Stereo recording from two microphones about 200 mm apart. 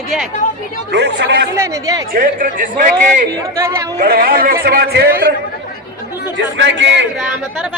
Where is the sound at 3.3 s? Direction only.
15° right (ahead or behind).